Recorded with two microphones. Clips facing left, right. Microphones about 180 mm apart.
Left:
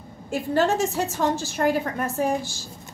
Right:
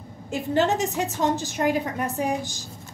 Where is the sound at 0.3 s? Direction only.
20° right (ahead or behind).